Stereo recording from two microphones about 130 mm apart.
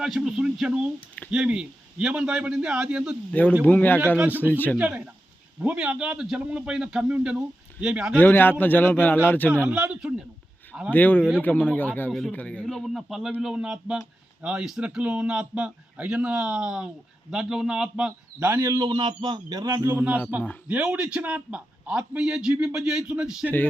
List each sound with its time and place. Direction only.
0.0 s a man's voice: 5° right (ahead or behind)
3.7 s a man's voice: 15° left (ahead or behind)
4.8 s a man's voice: 10° right (ahead or behind)
8.2 s a man's voice: 15° left (ahead or behind)
9.6 s a man's voice: 10° right (ahead or behind)
10.9 s a man's voice: 15° left (ahead or behind)
11.2 s a man's voice: 5° right (ahead or behind)
11.4 s a man's voice: 15° left (ahead or behind); by 18.9 s 20° right (ahead or behind)
18.9 s a man's voice: 35° right (ahead or behind)
19.9 s a man's voice: 15° right (ahead or behind)